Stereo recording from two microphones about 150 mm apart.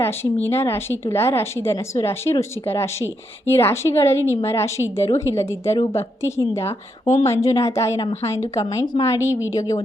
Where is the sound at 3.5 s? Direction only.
15° left (ahead or behind).